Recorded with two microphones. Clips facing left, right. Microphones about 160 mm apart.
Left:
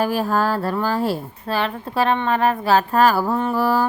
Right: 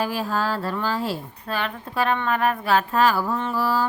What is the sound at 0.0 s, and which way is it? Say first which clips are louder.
Speech: left 5 dB; 50° left (ahead or behind).